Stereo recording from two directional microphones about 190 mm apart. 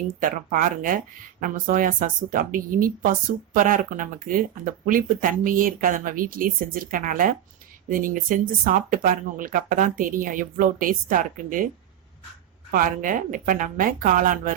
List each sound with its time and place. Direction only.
0.2 s speech: 45° right (ahead or behind)
12.7 s speech: 45° right (ahead or behind)